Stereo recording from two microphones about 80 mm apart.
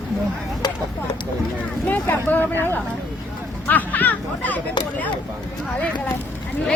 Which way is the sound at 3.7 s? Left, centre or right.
Left.